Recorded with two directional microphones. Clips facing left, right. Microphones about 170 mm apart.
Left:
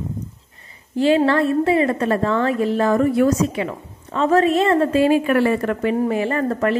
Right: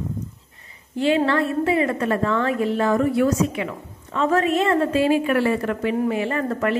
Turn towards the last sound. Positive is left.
turn(degrees=40)  # may be behind; listen again after turning